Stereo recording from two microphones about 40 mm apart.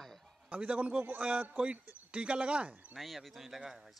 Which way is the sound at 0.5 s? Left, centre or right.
Right.